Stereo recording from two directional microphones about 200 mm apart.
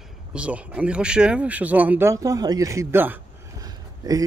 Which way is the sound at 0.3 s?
5° right (ahead or behind).